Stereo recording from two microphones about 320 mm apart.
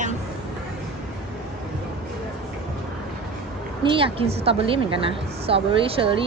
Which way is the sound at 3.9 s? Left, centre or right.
Centre.